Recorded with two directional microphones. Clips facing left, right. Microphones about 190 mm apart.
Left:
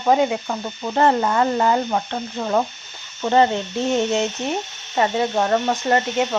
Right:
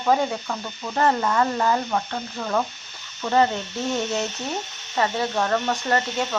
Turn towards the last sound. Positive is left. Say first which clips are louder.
# left 4 dB
turn(degrees=20)  # may be behind; listen again after turning